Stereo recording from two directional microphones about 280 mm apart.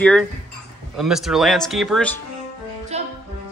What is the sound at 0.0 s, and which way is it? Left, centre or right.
Speech, centre.